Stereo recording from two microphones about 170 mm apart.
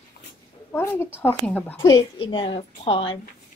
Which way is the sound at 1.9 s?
30° left (ahead or behind).